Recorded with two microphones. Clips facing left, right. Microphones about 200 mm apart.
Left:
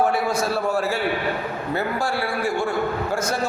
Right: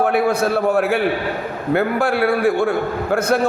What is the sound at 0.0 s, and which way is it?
A man's voice, 60° right (ahead or behind).